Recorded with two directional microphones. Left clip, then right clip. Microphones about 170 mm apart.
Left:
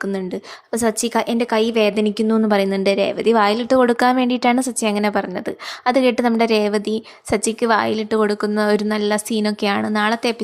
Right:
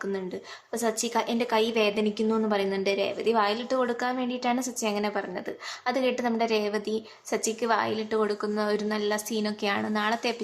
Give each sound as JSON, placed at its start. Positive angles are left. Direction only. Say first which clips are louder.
{"t": 0.7, "sound": "a woman's voice", "louder": "left 8 dB", "side_deg": 45}